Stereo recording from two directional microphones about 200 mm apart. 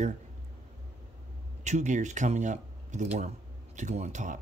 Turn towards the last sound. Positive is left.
turn(degrees=-35)  # may be behind; listen again after turning